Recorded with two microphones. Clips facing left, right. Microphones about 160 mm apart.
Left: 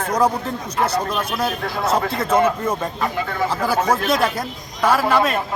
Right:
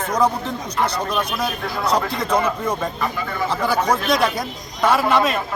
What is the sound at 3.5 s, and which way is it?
Speech, 5° left (ahead or behind).